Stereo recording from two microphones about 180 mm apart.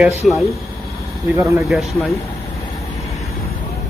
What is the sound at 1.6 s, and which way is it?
Speech, centre (ahead or behind).